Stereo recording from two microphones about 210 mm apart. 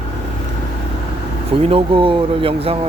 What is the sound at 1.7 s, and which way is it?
Speech, 25° right (ahead or behind).